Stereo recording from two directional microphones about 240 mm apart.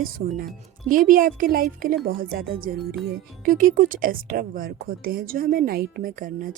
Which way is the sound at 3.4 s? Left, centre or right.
Right.